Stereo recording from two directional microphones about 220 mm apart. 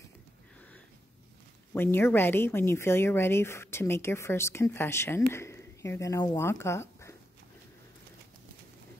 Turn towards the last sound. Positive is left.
turn(degrees=10)  # may be behind; listen again after turning